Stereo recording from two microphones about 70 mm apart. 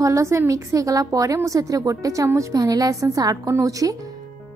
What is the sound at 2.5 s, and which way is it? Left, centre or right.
A woman's voice, right.